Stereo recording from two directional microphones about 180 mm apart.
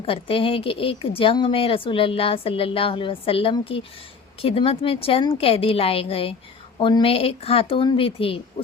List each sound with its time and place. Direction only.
0.0 s speech: 30° left (ahead or behind)